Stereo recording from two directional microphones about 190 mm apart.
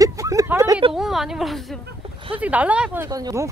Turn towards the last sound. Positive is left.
turn(degrees=-15)  # may be behind; listen again after turning